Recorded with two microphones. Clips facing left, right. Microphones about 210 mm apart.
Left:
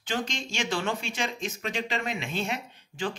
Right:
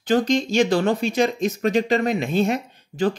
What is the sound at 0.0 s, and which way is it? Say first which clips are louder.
Speech: right 13 dB; 40° right (ahead or behind).